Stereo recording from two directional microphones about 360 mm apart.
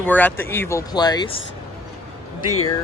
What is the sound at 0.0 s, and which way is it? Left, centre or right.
Speech, centre.